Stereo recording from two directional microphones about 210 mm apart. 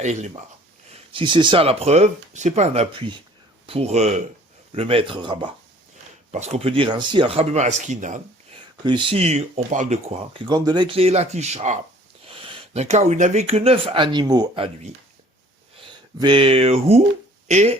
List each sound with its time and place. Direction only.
0.0 s speech: 35° right (ahead or behind)
0.9 s speech: 25° right (ahead or behind)
8.8 s speech: 20° right (ahead or behind)